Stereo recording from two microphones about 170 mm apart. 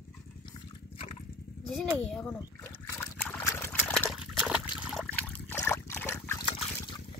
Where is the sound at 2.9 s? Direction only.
15° left (ahead or behind).